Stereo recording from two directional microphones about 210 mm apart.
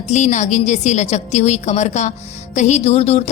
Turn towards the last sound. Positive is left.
turn(degrees=30)  # may be behind; listen again after turning